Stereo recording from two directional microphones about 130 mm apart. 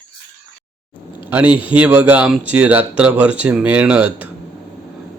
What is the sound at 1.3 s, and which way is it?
Speech, 10° right (ahead or behind).